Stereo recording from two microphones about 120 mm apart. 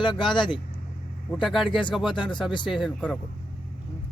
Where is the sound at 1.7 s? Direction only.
45° left (ahead or behind).